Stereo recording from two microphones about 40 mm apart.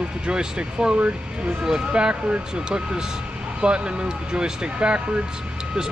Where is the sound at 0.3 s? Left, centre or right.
Right.